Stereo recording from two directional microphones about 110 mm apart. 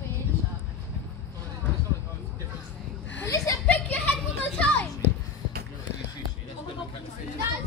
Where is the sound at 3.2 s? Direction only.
30° left (ahead or behind).